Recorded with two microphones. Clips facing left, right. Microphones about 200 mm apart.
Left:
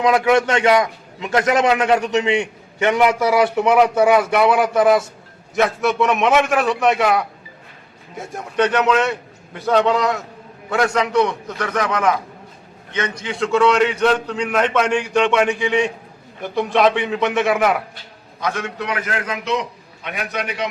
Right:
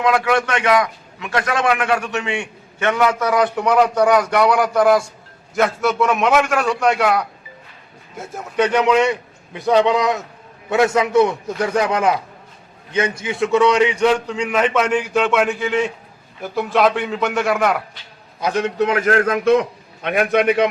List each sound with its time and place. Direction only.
0.0 s a man's voice: 20° left (ahead or behind); by 11.8 s 30° right (ahead or behind)
13.6 s a man's voice: 15° right (ahead or behind); by 17.8 s centre (ahead or behind)
18.8 s a man's voice: 45° right (ahead or behind)